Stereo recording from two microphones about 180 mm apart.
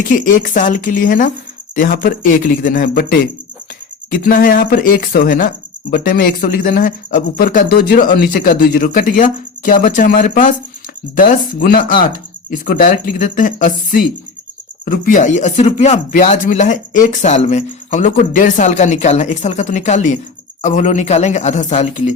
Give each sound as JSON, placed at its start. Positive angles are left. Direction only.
{"t": 0.1, "sound": "speech", "side_deg": 50}